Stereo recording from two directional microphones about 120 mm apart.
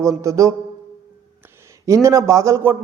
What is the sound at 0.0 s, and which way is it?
Speech, 25° right (ahead or behind).